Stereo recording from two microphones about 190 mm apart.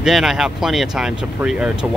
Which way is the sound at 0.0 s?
Centre (ahead or behind).